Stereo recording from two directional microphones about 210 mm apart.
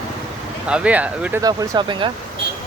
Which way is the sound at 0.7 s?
5° right (ahead or behind).